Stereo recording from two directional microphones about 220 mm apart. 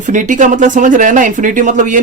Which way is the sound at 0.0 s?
35° right (ahead or behind).